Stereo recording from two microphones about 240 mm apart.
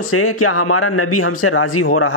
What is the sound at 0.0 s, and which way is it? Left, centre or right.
A man's voice, left.